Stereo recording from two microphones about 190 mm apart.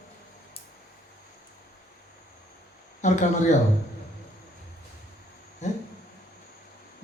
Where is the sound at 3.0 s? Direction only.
40° left (ahead or behind).